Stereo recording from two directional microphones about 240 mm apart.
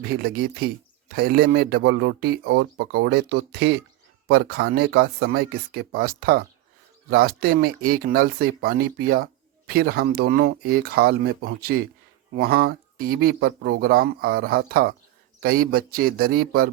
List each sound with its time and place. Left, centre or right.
0.0 s speech: right